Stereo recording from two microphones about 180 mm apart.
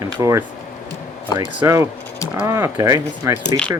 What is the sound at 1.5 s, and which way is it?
Speech, 15° right (ahead or behind).